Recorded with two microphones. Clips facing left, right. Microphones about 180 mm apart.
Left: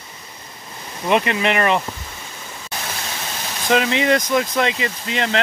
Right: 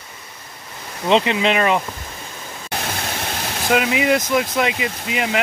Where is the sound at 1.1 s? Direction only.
20° right (ahead or behind).